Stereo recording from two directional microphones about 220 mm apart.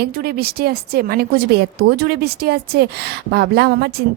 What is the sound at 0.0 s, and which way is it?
A woman's voice, 45° right (ahead or behind).